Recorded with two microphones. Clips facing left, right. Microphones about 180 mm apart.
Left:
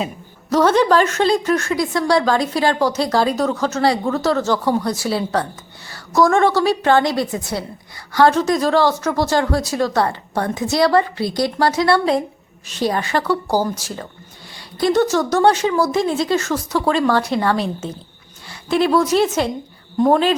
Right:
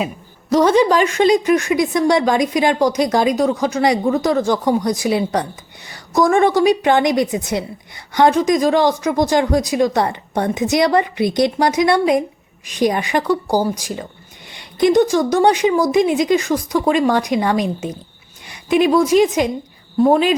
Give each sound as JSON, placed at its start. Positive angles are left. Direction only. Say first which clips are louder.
{"t": 0.5, "sound": "a woman's voice", "louder": "right 1 dB", "side_deg": -10}